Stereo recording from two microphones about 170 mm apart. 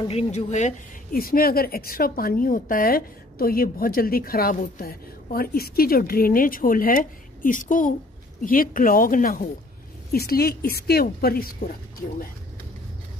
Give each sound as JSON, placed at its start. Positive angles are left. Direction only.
{"t": 0.1, "sound": "speech", "side_deg": 35}
{"t": 1.1, "sound": "a woman's voice", "side_deg": 60}
{"t": 10.1, "sound": "a woman's voice", "side_deg": 65}